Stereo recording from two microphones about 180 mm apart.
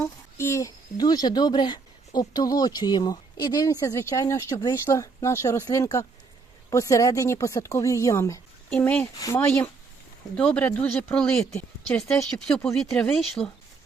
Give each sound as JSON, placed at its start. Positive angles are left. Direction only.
{"t": 0.0, "sound": "a woman's voice", "side_deg": 15}
{"t": 10.3, "sound": "a woman's voice", "side_deg": 5}